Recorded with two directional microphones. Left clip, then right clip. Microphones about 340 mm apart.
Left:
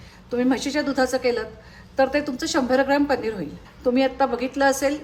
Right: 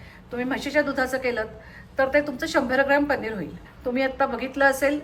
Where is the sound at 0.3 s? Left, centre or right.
Centre.